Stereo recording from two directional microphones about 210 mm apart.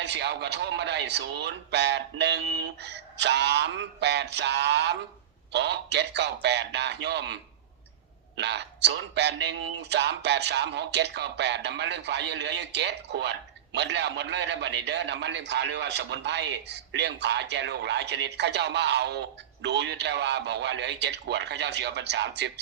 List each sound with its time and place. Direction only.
0.0 s a man's voice: 55° right (ahead or behind)
8.4 s a man's voice: 55° right (ahead or behind)